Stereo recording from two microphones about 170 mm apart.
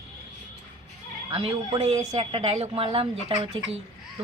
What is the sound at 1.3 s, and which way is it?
Speech, 30° right (ahead or behind).